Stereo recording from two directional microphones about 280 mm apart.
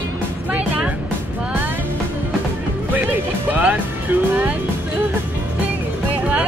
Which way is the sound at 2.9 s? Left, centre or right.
Centre.